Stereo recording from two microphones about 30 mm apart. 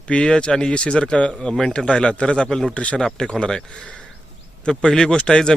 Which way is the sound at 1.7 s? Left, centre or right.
Left.